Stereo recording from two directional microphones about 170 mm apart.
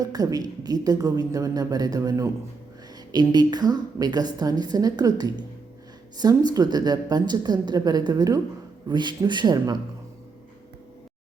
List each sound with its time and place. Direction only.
0.0 s a woman's voice: 20° right (ahead or behind)